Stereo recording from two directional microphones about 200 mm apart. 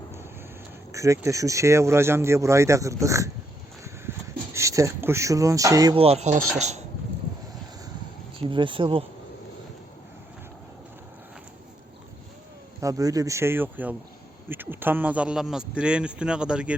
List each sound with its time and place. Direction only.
0.9 s speech: 15° right (ahead or behind)
4.5 s speech: 15° right (ahead or behind)
6.0 s speech: 30° right (ahead or behind)
8.4 s speech: 25° right (ahead or behind)
12.8 s speech: 15° right (ahead or behind)